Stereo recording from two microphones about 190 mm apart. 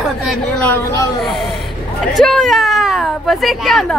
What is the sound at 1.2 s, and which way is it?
A woman's voice, centre (ahead or behind).